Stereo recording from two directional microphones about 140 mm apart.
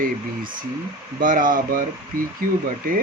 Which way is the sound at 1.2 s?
75° right (ahead or behind).